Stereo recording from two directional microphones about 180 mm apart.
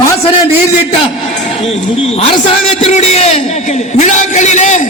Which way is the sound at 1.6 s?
35° left (ahead or behind).